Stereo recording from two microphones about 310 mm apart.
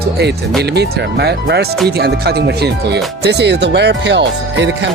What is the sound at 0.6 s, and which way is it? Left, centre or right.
Speech, right.